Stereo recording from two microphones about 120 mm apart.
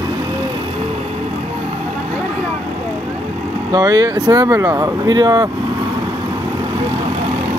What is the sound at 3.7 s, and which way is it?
Speech, 30° right (ahead or behind).